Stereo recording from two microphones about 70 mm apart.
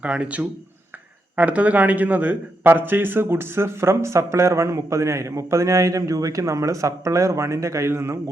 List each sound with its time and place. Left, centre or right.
0.0 s a man's voice: centre; by 8.2 s right